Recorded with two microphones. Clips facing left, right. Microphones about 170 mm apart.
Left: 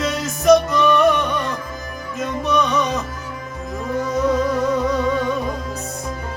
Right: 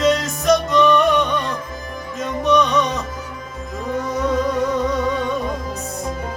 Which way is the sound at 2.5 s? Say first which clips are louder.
Right 3 dB; centre (ahead or behind).